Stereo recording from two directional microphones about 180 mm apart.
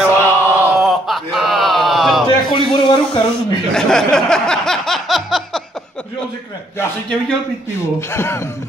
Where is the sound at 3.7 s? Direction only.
5° left (ahead or behind).